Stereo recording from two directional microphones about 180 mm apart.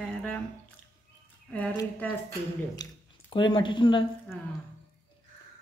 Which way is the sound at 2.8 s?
25° left (ahead or behind).